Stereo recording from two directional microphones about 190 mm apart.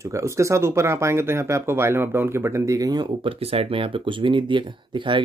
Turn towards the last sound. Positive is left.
turn(degrees=-25)  # may be behind; listen again after turning